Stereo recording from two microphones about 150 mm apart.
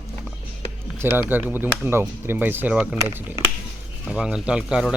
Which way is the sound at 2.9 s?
25° right (ahead or behind).